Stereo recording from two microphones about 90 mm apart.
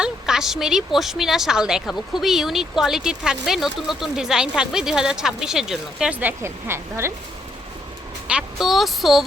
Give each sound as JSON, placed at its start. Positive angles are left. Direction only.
{"t": 0.0, "sound": "a woman's voice", "side_deg": -5}
{"t": 6.1, "sound": "speech", "side_deg": -25}
{"t": 8.3, "sound": "a woman's voice", "side_deg": -5}